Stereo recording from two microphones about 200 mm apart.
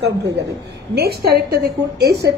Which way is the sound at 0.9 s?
50° right (ahead or behind).